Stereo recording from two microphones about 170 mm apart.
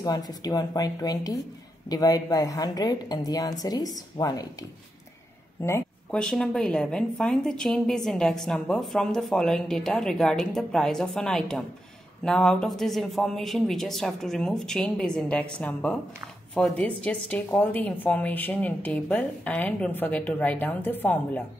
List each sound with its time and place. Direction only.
0.0 s a woman's voice: 25° left (ahead or behind)
5.6 s a sound: 15° left (ahead or behind)
6.2 s a woman's voice: 5° left (ahead or behind)